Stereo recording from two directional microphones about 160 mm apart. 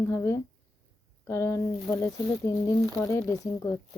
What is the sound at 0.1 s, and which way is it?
A woman's voice, 15° left (ahead or behind).